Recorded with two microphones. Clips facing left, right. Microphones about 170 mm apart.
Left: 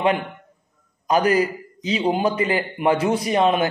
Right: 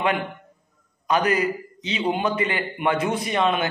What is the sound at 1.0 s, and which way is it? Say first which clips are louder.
A man's voice: left 3 dB; 35° left (ahead or behind).